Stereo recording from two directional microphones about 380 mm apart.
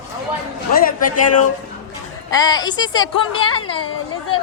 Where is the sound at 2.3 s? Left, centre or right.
Centre.